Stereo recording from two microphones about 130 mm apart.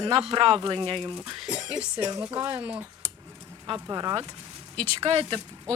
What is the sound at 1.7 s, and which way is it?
Speech, 10° right (ahead or behind).